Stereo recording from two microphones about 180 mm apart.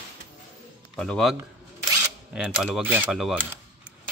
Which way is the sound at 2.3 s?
5° right (ahead or behind).